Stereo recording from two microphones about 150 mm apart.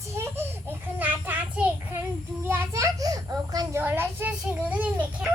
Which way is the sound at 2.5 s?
20° right (ahead or behind).